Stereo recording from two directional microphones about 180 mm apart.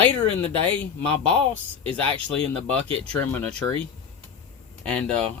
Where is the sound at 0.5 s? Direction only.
30° right (ahead or behind).